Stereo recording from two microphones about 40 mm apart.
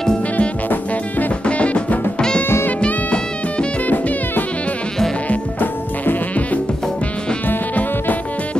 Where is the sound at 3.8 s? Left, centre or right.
Left.